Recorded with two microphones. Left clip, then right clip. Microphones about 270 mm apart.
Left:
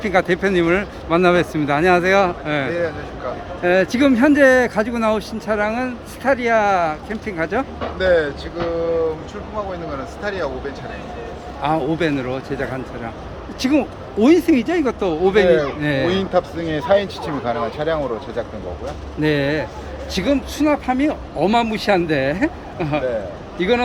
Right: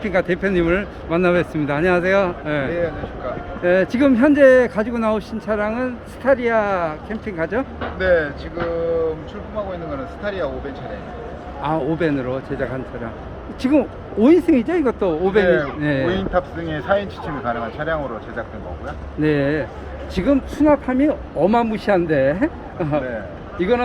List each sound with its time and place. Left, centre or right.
0.0 s speech: centre
7.8 s speech: left
10.2 s speech: centre
11.6 s speech: centre
16.0 s speech: left
19.2 s speech: centre